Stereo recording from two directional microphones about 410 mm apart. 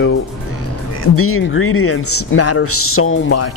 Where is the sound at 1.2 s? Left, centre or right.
Left.